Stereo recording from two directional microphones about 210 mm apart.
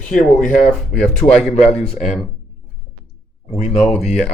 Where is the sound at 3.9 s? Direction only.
30° left (ahead or behind).